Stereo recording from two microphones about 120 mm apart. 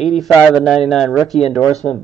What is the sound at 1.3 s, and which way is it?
Speech, 60° left (ahead or behind).